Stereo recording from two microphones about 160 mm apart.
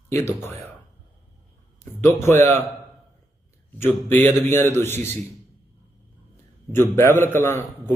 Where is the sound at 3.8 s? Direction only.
10° left (ahead or behind).